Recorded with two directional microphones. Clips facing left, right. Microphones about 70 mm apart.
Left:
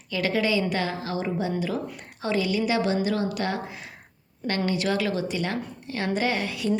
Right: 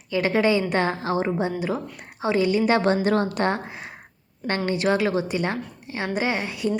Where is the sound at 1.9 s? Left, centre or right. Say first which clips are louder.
Right 4 dB; right.